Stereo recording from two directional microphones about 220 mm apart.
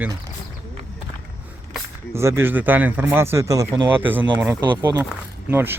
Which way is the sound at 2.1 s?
10° right (ahead or behind).